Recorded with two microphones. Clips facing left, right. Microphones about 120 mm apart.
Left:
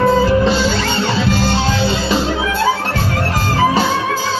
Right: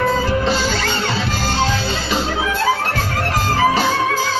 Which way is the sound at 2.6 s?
30° left (ahead or behind).